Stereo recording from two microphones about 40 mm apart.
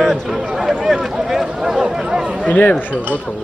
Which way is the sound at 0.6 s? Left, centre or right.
Centre.